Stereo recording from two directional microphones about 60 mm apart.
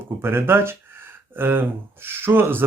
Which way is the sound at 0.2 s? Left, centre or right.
Right.